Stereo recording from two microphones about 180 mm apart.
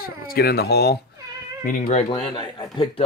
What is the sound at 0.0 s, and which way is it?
Speech, 55° left (ahead or behind).